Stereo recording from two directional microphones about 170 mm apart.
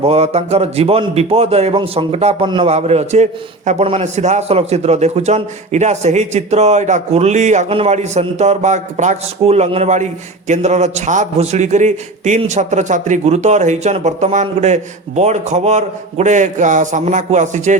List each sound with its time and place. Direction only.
0.0 s a man's voice: 40° right (ahead or behind)